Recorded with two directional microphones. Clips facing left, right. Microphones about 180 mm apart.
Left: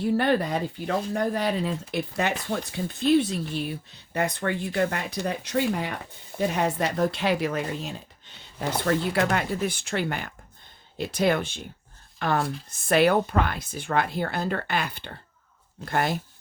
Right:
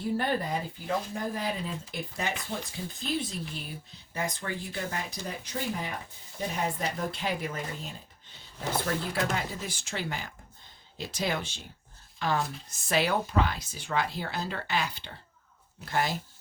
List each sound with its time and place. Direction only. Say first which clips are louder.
0.0 s speech: left 6 dB; 75° left (ahead or behind); by 16.1 s 55° left (ahead or behind)